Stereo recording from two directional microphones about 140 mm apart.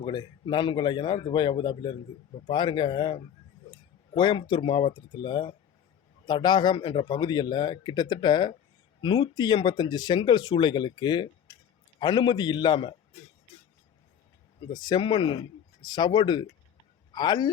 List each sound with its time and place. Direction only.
0.0 s a man's voice: 35° left (ahead or behind)
14.7 s a man's voice: 30° left (ahead or behind)